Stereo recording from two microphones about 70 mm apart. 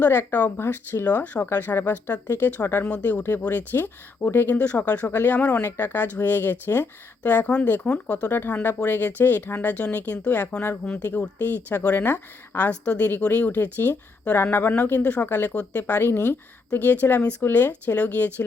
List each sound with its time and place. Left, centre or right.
0.0 s a woman's voice: left
0.6 s a woman's voice: left
1.0 s a woman's voice: left
8.3 s a woman's voice: left
16.7 s a woman's voice: left